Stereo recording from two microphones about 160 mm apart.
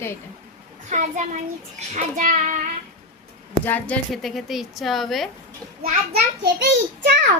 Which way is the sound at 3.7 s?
10° left (ahead or behind).